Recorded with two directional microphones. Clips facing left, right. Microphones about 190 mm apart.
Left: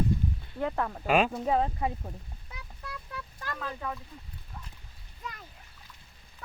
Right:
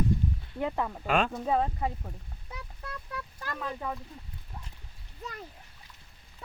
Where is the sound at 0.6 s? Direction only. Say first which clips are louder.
Even; 5° right (ahead or behind).